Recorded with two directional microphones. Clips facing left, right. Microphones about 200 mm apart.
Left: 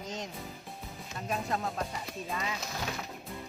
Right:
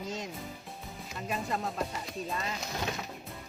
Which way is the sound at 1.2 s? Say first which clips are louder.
Left 1 dB; centre (ahead or behind).